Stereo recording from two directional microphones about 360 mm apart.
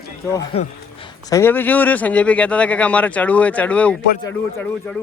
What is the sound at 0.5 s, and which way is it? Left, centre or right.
Speech, centre.